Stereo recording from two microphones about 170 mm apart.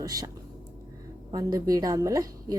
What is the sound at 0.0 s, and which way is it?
Speech, 20° right (ahead or behind).